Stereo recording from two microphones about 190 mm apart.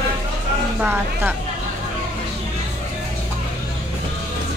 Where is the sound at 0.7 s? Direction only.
10° right (ahead or behind).